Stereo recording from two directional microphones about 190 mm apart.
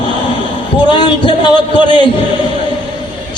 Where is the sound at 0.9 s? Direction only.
25° left (ahead or behind).